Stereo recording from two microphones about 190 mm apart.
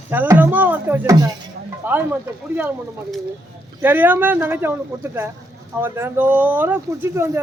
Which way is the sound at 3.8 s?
10° right (ahead or behind).